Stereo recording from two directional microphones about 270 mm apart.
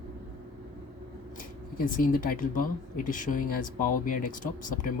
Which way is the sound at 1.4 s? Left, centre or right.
Left.